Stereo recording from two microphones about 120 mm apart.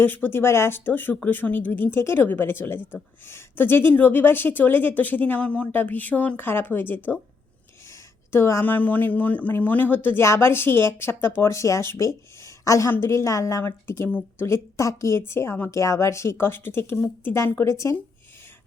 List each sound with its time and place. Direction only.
0.0 s speech: 15° left (ahead or behind)